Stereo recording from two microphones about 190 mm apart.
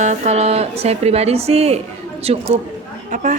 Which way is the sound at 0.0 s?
35° right (ahead or behind).